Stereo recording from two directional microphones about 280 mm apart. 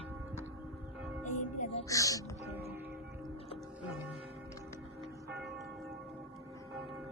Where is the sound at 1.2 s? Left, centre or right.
Left.